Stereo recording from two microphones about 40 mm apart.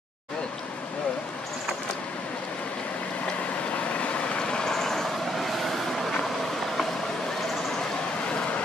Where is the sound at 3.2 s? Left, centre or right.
Left; by 6.1 s centre.